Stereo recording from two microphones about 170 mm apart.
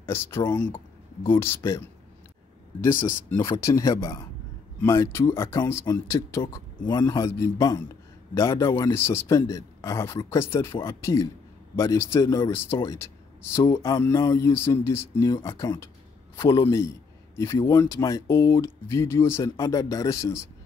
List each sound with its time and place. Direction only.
0.0 s speech: 15° left (ahead or behind)
0.7 s a sound: 25° left (ahead or behind)
1.3 s speech: 15° left (ahead or behind)
2.9 s speech: 50° left (ahead or behind)
3.3 s a man's voice: 15° left (ahead or behind)